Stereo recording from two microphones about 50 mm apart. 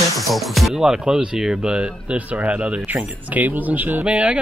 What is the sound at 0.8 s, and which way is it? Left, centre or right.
Speech, centre.